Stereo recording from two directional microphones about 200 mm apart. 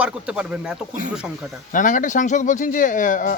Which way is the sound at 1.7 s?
40° left (ahead or behind).